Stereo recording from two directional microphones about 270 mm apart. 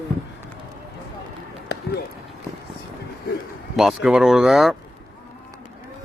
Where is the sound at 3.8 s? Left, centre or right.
Centre.